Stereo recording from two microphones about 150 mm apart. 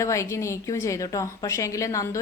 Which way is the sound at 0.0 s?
20° left (ahead or behind).